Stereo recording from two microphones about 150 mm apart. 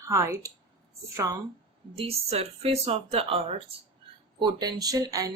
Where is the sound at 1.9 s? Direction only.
40° right (ahead or behind).